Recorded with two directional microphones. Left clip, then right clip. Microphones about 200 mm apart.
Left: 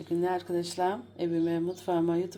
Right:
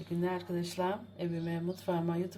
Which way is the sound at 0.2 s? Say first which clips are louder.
Left 5 dB; 40° left (ahead or behind).